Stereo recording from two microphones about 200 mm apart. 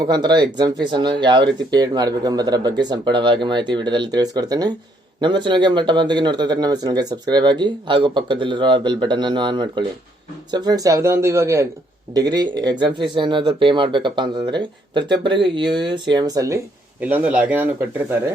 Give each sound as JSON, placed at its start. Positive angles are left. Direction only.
{"t": 0.0, "sound": "speech", "side_deg": -20}